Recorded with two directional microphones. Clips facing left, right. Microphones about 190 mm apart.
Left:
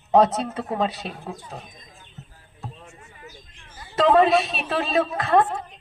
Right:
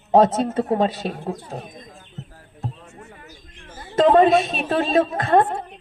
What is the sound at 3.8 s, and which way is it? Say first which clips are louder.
A woman's voice: right 3 dB; 45° right (ahead or behind).